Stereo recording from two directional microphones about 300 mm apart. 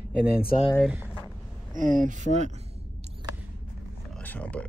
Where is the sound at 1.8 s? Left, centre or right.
Right.